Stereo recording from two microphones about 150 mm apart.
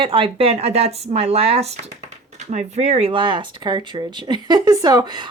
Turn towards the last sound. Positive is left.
turn(degrees=-25)  # may be behind; listen again after turning